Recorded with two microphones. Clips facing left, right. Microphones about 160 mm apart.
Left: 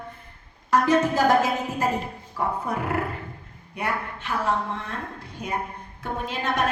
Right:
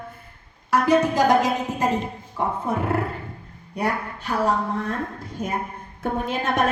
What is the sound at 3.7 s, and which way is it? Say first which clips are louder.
A woman's voice: right 3 dB; 40° right (ahead or behind).